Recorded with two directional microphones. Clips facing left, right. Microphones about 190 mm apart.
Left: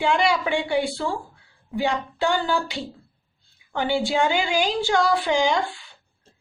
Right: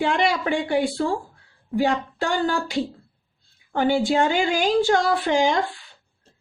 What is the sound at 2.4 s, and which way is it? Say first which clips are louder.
Speech: right 1 dB; 45° right (ahead or behind).